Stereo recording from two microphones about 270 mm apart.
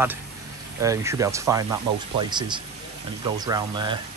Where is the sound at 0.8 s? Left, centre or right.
Centre.